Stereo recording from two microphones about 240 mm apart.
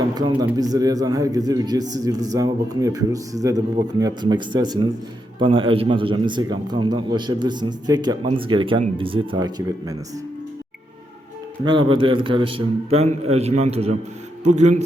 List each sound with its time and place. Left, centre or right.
0.1 s a man's voice: centre
11.6 s a man's voice: right